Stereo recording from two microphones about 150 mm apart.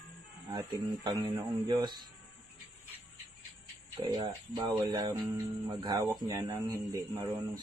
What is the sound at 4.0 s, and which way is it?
Mantra, 25° right (ahead or behind).